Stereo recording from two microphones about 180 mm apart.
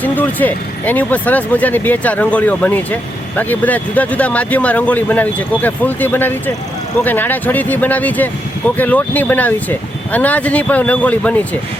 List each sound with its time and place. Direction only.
0.0 s speech: 10° left (ahead or behind)